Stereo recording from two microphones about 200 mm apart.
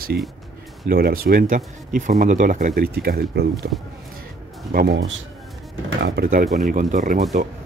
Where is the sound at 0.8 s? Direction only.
50° right (ahead or behind).